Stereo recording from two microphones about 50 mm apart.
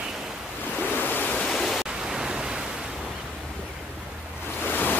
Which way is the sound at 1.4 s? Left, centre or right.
Centre.